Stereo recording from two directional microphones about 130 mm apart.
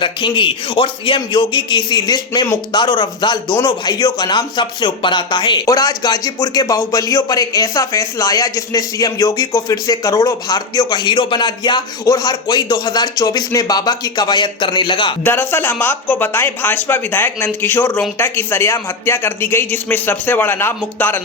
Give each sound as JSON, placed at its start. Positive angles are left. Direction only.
{"t": 0.0, "sound": "a man's voice", "side_deg": 40}
{"t": 15.2, "sound": "a man's voice", "side_deg": 15}